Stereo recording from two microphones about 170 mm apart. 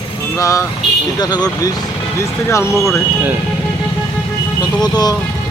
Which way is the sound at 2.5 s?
15° left (ahead or behind).